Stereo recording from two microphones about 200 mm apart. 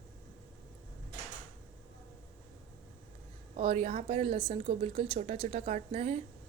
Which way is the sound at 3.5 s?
35° right (ahead or behind).